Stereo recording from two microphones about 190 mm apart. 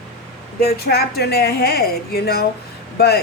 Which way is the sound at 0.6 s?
55° left (ahead or behind).